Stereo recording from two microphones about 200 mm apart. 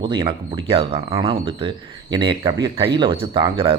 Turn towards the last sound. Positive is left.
turn(degrees=-25)  # may be behind; listen again after turning